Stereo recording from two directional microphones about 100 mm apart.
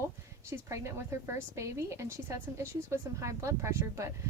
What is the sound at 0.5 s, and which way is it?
A woman's voice, 25° right (ahead or behind).